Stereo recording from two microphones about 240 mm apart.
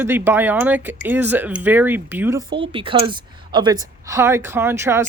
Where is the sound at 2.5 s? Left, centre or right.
Right.